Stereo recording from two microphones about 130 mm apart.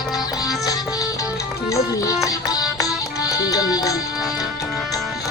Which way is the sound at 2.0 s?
30° left (ahead or behind).